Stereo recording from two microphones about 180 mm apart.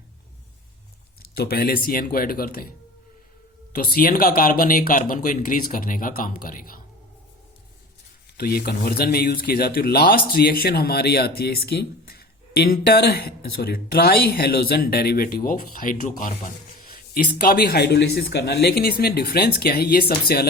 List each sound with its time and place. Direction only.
1.4 s speech: 60° left (ahead or behind)
3.9 s speech: 55° left (ahead or behind)
8.4 s speech: 60° left (ahead or behind)